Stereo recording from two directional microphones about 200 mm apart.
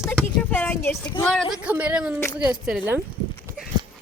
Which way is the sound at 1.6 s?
10° right (ahead or behind).